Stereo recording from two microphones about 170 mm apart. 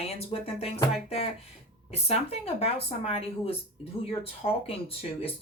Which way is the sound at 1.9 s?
35° left (ahead or behind).